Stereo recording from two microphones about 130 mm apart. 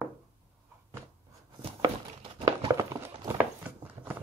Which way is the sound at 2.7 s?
25° right (ahead or behind).